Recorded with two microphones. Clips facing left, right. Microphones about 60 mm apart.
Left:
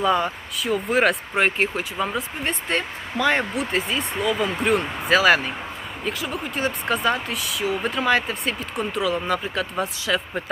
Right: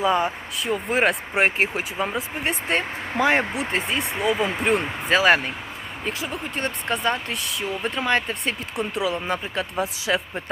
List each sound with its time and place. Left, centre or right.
0.0 s speech: centre
1.4 s speech: centre
2.0 s speech: centre
3.1 s speech: right
3.5 s speech: centre